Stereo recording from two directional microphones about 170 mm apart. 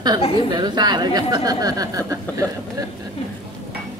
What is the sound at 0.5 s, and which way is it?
Speech, 25° right (ahead or behind).